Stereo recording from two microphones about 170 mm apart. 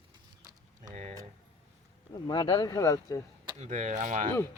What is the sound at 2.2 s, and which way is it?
Speech, 25° left (ahead or behind).